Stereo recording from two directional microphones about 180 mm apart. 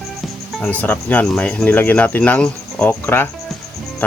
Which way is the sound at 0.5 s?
10° left (ahead or behind).